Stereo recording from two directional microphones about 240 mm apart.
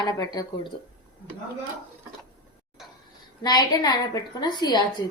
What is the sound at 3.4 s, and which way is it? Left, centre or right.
A woman's voice, centre.